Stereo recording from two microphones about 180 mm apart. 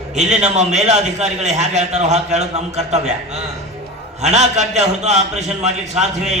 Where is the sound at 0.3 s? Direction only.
40° right (ahead or behind).